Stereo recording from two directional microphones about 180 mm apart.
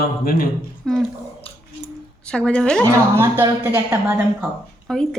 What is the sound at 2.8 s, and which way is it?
A woman's voice, 15° right (ahead or behind).